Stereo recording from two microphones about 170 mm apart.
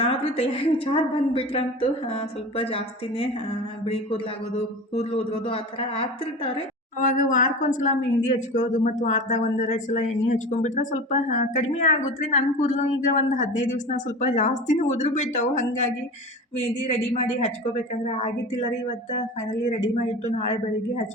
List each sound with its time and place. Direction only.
0.0 s a woman's voice: 35° left (ahead or behind)
4.9 s a woman's voice: 35° left (ahead or behind)
7.2 s a woman's voice: 50° left (ahead or behind)